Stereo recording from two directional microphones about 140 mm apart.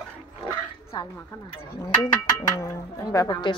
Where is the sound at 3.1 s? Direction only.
25° left (ahead or behind).